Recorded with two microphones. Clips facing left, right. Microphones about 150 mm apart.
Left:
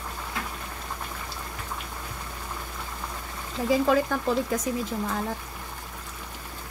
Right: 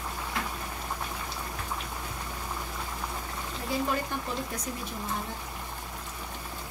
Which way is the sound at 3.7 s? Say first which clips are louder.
Left 8 dB; 90° left.